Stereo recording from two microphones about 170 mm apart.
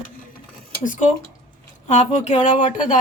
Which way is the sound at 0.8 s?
45° left (ahead or behind).